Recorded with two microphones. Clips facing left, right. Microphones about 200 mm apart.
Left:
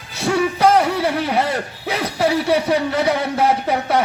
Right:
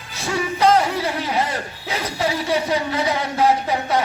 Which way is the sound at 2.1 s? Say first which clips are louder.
Left 5 dB; 60° left (ahead or behind).